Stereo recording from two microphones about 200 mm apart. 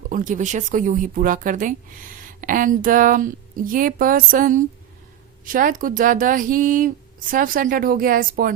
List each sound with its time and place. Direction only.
0.1 s speech: 40° right (ahead or behind)